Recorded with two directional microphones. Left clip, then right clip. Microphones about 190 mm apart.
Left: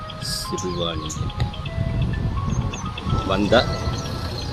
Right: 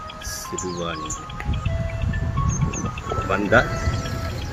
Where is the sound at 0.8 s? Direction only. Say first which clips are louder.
Left 1 dB; 10° left (ahead or behind).